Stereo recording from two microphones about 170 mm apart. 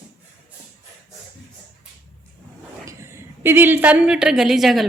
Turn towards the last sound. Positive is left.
turn(degrees=0)  # may be behind; listen again after turning